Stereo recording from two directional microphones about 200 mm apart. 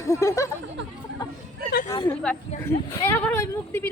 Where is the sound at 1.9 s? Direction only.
15° left (ahead or behind).